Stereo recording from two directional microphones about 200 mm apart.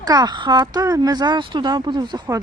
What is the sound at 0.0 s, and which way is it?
Speech, 20° right (ahead or behind).